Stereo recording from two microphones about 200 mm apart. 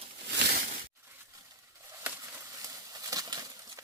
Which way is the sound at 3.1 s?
20° right (ahead or behind).